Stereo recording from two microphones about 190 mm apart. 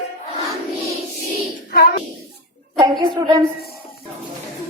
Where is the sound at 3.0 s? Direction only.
25° right (ahead or behind).